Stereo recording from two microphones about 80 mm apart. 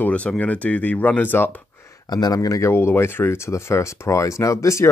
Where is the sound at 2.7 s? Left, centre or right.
Left.